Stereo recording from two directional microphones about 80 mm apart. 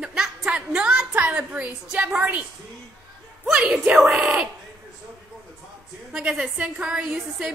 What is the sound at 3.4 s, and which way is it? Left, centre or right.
Speech, centre.